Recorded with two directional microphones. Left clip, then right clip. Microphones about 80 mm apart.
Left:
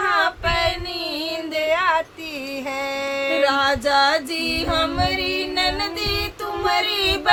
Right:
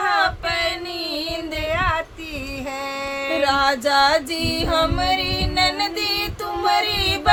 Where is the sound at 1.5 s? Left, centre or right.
Left.